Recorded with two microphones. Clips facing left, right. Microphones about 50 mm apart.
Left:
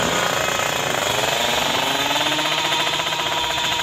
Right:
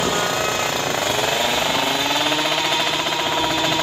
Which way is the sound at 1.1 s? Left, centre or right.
Centre.